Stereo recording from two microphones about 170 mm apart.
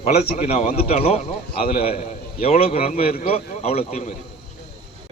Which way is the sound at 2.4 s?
45° left (ahead or behind).